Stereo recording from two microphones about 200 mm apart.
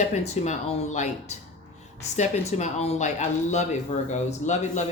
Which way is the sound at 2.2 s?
35° left (ahead or behind).